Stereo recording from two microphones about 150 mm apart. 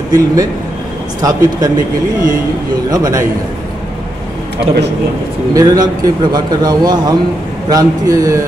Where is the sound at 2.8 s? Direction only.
25° right (ahead or behind).